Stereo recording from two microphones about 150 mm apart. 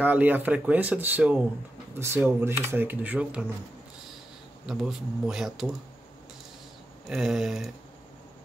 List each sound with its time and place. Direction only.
0.0 s speech: 10° right (ahead or behind)
4.6 s speech: 5° right (ahead or behind)
7.1 s speech: 5° right (ahead or behind)